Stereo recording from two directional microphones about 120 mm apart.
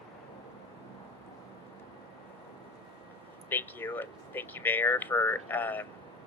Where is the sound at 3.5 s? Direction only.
15° left (ahead or behind).